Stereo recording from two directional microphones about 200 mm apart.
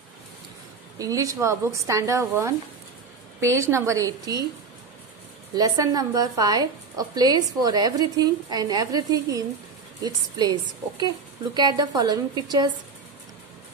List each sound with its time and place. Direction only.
0.9 s speech: 15° right (ahead or behind)
5.5 s a woman's voice: 20° right (ahead or behind)